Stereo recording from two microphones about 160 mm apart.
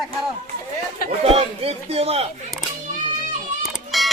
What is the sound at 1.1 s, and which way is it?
Speech, 35° right (ahead or behind).